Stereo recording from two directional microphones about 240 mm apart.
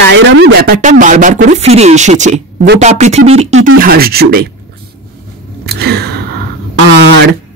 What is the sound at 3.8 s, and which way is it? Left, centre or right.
Speech, right.